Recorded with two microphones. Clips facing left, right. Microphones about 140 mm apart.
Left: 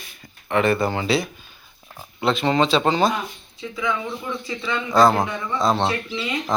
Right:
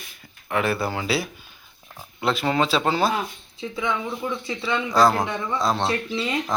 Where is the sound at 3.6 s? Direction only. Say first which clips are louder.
Left 1 dB; 25° right (ahead or behind).